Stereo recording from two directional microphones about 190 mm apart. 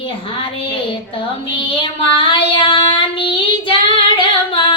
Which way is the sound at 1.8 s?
25° left (ahead or behind).